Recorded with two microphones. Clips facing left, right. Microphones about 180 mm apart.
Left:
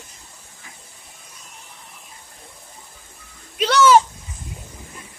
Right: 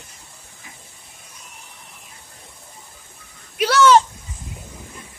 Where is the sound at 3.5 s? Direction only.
10° right (ahead or behind).